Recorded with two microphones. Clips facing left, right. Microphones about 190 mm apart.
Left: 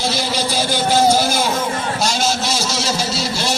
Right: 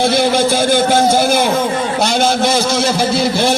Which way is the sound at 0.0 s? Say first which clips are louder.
Right 8 dB; 55° right (ahead or behind).